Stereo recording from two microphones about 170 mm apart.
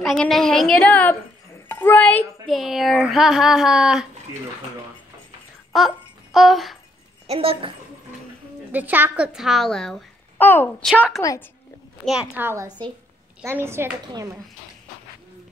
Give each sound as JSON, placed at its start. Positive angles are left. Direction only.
{"t": 0.0, "sound": "speech", "side_deg": 0}
{"t": 5.7, "sound": "babbling", "side_deg": 0}
{"t": 7.2, "sound": "a woman's voice", "side_deg": -35}
{"t": 8.7, "sound": "speech", "side_deg": -10}
{"t": 10.9, "sound": "speech", "side_deg": 0}
{"t": 11.1, "sound": "a woman's voice", "side_deg": 20}
{"t": 12.4, "sound": "a woman's voice", "side_deg": -15}